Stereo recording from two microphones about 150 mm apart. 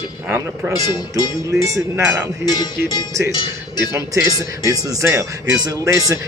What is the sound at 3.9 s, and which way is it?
Speech, 20° right (ahead or behind).